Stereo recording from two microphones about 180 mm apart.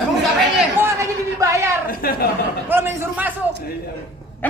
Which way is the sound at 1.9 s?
55° left (ahead or behind).